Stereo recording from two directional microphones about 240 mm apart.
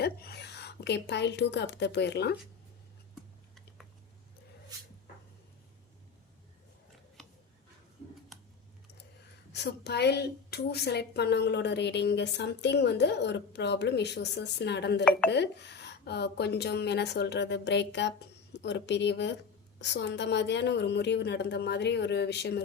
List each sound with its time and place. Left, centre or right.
0.0 s a woman's voice: left
4.7 s cupboard open or close: centre
7.2 s a sound: centre
9.5 s a woman's voice: left